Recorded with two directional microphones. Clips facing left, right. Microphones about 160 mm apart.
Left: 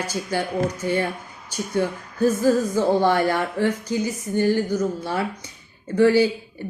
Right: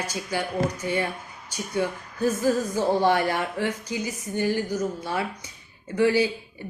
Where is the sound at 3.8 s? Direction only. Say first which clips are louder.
Left 6 dB; 30° left (ahead or behind).